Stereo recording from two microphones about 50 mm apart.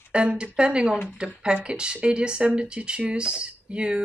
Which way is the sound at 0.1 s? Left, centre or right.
Right.